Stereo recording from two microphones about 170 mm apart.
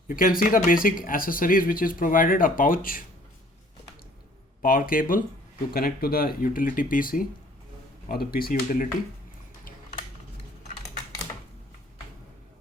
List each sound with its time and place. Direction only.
0.1 s speech: 55° left (ahead or behind)
4.6 s speech: 55° left (ahead or behind)